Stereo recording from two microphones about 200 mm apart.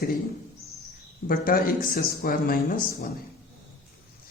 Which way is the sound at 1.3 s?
45° left (ahead or behind).